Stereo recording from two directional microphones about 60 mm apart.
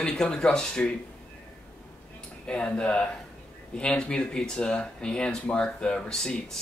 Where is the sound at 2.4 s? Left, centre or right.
Centre.